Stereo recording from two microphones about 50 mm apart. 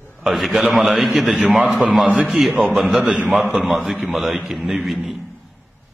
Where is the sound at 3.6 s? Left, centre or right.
Centre.